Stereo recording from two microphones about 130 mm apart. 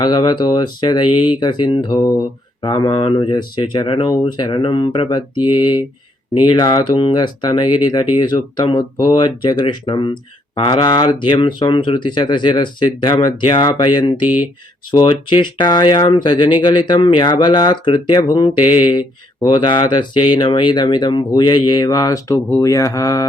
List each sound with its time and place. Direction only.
0.0 s speech: 35° left (ahead or behind)